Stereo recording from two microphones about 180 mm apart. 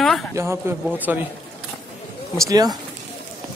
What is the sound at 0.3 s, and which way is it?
Speech, 15° right (ahead or behind).